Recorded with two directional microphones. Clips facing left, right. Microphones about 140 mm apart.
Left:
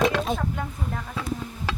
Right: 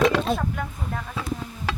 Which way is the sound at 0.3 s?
20° left (ahead or behind).